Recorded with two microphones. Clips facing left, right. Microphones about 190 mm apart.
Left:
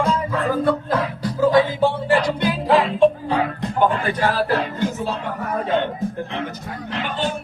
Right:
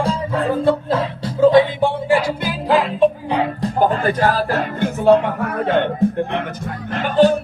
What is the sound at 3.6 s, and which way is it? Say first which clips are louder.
Music: right 2 dB; 40° right (ahead or behind).